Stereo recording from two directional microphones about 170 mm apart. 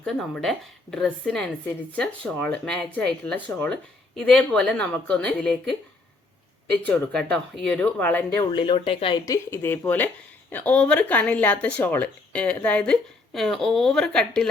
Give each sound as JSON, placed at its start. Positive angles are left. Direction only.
{"t": 0.0, "sound": "speech", "side_deg": 0}
{"t": 6.8, "sound": "speech", "side_deg": 5}
{"t": 8.4, "sound": "speech", "side_deg": 30}
{"t": 9.2, "sound": "speech", "side_deg": 15}